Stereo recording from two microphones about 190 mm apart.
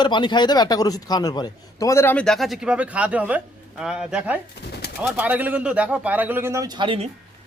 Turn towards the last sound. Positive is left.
turn(degrees=-25)  # may be behind; listen again after turning